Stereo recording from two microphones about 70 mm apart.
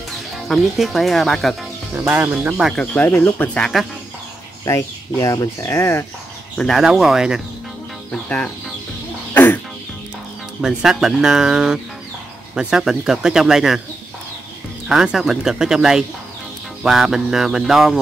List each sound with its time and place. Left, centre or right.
0.5 s speech: centre
2.0 s speech: right
2.7 s speech: centre
3.2 s speech: left
3.7 s speech: centre
4.6 s speech: left
5.7 s speech: left
6.7 s speech: centre
8.1 s speech: centre
9.3 s music: left
10.6 s speech: centre
14.9 s speech: centre